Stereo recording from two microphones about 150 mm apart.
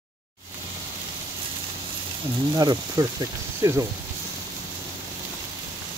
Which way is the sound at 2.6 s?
25° right (ahead or behind).